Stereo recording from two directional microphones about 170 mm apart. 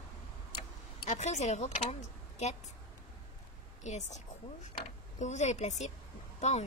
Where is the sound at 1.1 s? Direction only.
45° left (ahead or behind).